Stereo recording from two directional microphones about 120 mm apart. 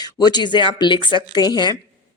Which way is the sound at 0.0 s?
35° left (ahead or behind).